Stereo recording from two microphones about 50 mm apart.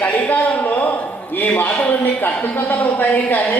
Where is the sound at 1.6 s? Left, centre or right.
Left.